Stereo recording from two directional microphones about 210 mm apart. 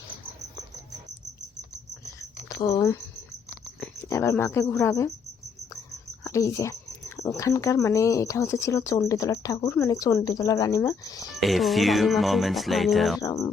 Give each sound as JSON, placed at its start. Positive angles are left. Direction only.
{"t": 2.6, "sound": "speech", "side_deg": 15}
{"t": 4.1, "sound": "speech", "side_deg": 15}
{"t": 6.2, "sound": "speech", "side_deg": 15}
{"t": 11.3, "sound": "speech", "side_deg": 0}
{"t": 13.2, "sound": "speech", "side_deg": 15}